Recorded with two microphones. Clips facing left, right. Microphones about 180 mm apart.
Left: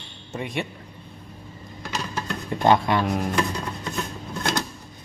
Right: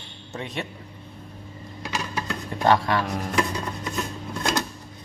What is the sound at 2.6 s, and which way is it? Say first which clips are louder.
Speech: left 1 dB; 20° left (ahead or behind).